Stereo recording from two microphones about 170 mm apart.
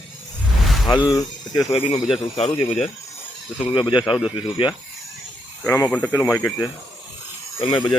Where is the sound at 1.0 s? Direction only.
20° left (ahead or behind).